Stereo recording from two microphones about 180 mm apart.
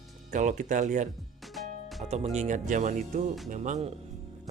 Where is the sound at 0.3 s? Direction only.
45° right (ahead or behind).